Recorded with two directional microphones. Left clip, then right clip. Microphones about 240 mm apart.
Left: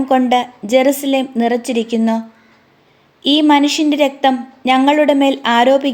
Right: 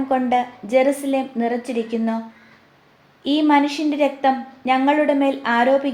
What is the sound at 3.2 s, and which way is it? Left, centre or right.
A woman's voice, left.